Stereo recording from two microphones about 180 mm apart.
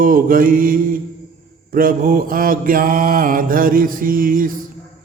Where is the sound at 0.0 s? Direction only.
50° right (ahead or behind).